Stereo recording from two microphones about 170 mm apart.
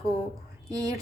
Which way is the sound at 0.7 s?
20° right (ahead or behind).